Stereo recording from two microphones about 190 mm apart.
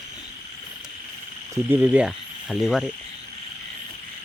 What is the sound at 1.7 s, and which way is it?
Speech, 10° right (ahead or behind).